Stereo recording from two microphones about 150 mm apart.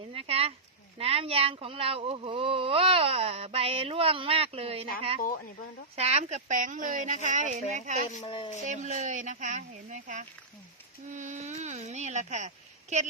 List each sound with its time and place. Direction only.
0.1 s a sound: 40° right (ahead or behind)
0.9 s speech: 40° right (ahead or behind)
6.0 s a woman's voice: 45° right (ahead or behind)
8.2 s speech: 35° left (ahead or behind)
8.6 s a woman's voice: 55° right (ahead or behind)